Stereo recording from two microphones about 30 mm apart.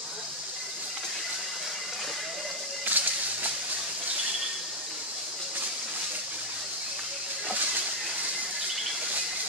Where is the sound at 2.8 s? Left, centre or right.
Right.